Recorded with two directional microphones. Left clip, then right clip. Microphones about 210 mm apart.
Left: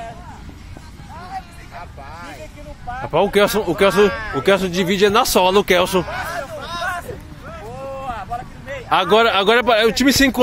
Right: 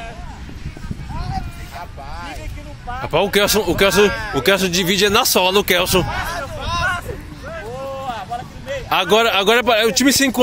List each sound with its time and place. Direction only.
3.1 s speech: 5° left (ahead or behind)
4.1 s speech: 30° right (ahead or behind)
4.4 s speech: centre (ahead or behind)
6.6 s vehicle: 55° left (ahead or behind)
8.1 s a sound: 10° right (ahead or behind)
8.8 s speech: centre (ahead or behind)